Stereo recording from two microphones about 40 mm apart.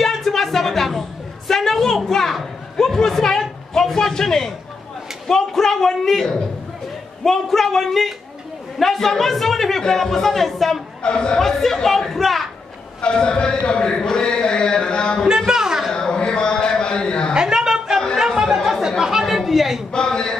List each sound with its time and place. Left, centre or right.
0.0 s music: centre
1.5 s a sound: centre
2.0 s children playing: centre
5.3 s a man's voice: centre
11.0 s a man's voice: left
11.4 s a woman's voice: centre
13.0 s a man's voice: left
15.3 s a woman's voice: centre
15.9 s a sound: left
17.3 s a sound: centre
18.3 s chatter: centre
18.7 s speech: centre
19.2 s chatter: centre
19.9 s a woman's voice: centre